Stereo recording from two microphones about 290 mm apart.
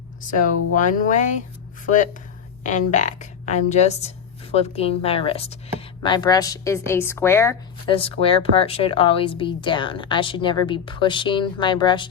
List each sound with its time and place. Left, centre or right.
0.2 s speech: left
2.6 s a woman's voice: left